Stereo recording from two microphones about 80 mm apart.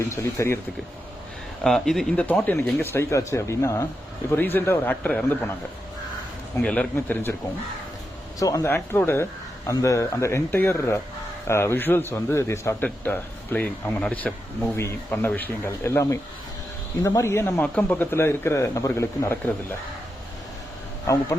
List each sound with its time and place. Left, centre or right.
0.1 s speech: left
1.6 s speech: centre
2.1 s speech: centre
2.8 s speech: left
4.3 s speech: left
5.0 s speech: centre
6.6 s speech: centre
8.4 s speech: left
8.6 s speech: left
9.6 s speech: left
12.1 s speech: left
12.8 s speech: centre
14.8 s speech: left
17.6 s speech: left